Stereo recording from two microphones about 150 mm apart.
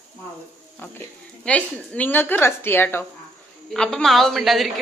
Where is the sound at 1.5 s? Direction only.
10° left (ahead or behind).